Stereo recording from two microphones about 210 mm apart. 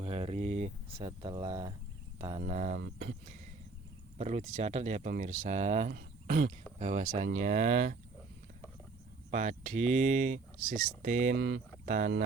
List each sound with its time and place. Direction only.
0.0 s speech: 30° right (ahead or behind)
2.4 s speech: 40° right (ahead or behind)
4.2 s speech: 30° right (ahead or behind)
9.3 s speech: 35° right (ahead or behind)
11.3 s speech: 50° right (ahead or behind)
11.9 s speech: 35° right (ahead or behind)